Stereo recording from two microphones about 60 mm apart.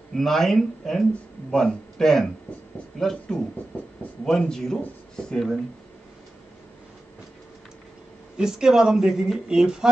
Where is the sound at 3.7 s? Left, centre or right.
Centre.